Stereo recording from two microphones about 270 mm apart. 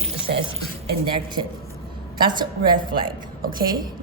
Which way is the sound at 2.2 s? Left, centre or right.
Centre.